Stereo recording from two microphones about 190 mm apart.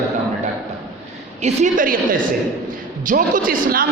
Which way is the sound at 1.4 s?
40° right (ahead or behind).